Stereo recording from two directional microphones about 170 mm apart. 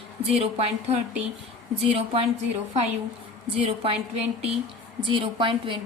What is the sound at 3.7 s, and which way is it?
Speech, 35° right (ahead or behind).